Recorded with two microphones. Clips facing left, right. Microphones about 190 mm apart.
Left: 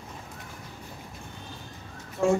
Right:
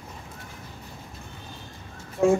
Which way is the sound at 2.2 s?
15° right (ahead or behind).